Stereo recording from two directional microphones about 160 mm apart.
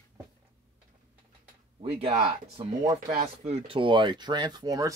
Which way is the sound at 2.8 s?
25° right (ahead or behind).